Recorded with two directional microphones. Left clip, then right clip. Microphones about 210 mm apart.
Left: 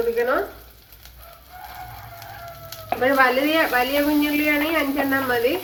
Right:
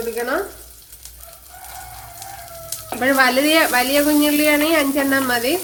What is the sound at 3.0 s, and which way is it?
Speech, 55° right (ahead or behind).